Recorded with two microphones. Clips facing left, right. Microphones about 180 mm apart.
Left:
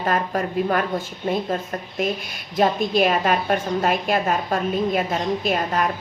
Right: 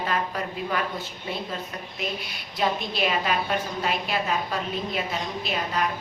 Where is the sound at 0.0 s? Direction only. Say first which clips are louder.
Left 5 dB; 50° left (ahead or behind).